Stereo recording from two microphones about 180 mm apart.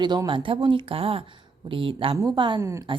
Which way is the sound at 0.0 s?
25° right (ahead or behind).